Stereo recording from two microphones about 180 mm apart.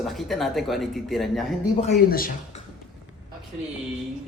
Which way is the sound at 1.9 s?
55° left (ahead or behind).